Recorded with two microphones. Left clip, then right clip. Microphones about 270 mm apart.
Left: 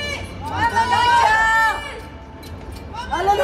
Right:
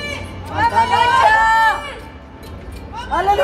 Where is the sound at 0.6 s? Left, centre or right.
Right.